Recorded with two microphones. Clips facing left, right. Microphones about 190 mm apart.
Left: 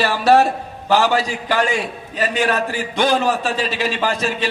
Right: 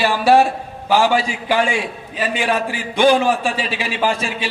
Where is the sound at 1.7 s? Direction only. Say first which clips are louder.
Even; 40° left (ahead or behind).